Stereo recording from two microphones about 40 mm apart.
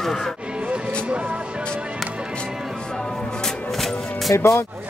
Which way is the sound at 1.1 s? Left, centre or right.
Right.